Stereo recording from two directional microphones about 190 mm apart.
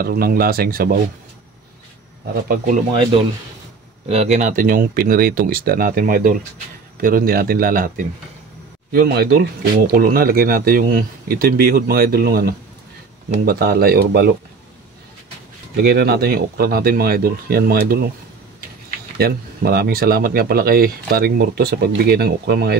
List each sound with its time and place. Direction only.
0.0 s speech: 50° right (ahead or behind)
2.4 s speech: 45° right (ahead or behind)
4.1 s speech: 35° right (ahead or behind); by 14.3 s 55° right (ahead or behind)
15.7 s speech: 55° right (ahead or behind)
19.1 s speech: 55° right (ahead or behind)